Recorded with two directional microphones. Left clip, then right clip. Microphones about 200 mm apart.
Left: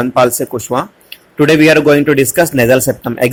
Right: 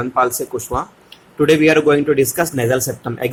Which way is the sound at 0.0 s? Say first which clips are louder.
Left 6 dB; 25° left (ahead or behind).